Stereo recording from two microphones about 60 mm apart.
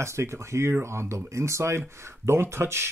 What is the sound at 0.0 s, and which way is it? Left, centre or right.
Speech, right.